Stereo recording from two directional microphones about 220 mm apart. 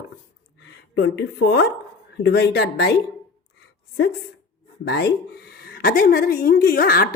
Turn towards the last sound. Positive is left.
turn(degrees=40)  # may be behind; listen again after turning